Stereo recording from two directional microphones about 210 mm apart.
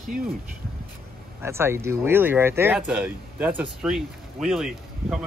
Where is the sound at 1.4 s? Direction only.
10° right (ahead or behind).